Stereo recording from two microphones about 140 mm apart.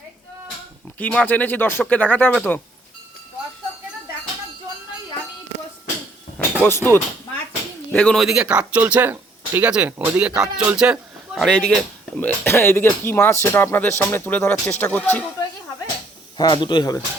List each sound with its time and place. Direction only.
0.9 s speech: 10° left (ahead or behind)
6.6 s speech: 15° left (ahead or behind)
16.4 s speech: 30° left (ahead or behind)